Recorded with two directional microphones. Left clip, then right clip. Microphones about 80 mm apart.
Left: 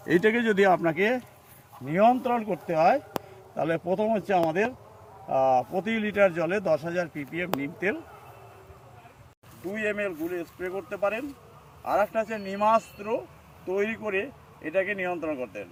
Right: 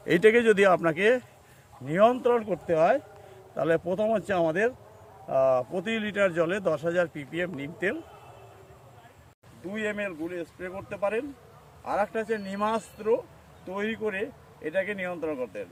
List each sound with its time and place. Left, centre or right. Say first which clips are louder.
0.6 s speech: even; right
1.8 s speech: even; right
2.4 s speech: left 1 dB; centre
5.8 s speech: left 3 dB; centre
9.7 s speech: left 2 dB; right